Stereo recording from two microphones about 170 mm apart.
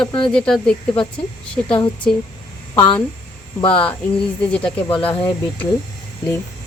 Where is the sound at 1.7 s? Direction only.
30° left (ahead or behind).